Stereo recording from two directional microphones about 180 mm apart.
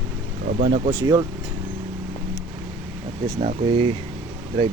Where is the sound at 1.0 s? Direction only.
15° right (ahead or behind).